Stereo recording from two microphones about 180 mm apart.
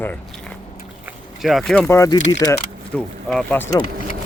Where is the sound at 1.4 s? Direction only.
Centre (ahead or behind).